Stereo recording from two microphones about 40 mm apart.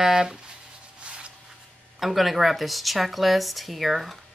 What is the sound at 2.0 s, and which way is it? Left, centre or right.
Speech, centre.